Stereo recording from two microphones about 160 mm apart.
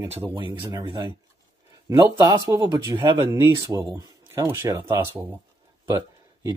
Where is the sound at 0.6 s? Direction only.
25° right (ahead or behind).